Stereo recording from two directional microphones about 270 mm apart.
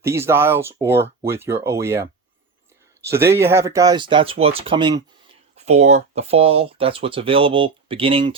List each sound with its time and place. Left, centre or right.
0.0 s speech: centre